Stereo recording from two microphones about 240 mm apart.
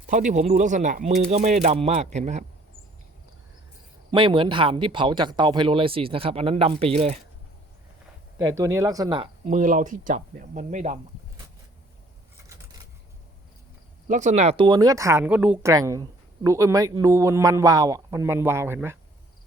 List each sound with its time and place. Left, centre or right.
0.1 s speech: right
4.1 s speech: right
8.4 s speech: centre; by 11.4 s right
14.1 s speech: right; by 18.9 s centre